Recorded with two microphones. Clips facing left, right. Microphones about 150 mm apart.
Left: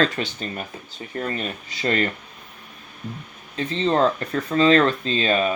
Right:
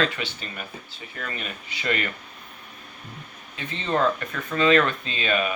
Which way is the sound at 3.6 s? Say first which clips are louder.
Left 5 dB; 35° left (ahead or behind).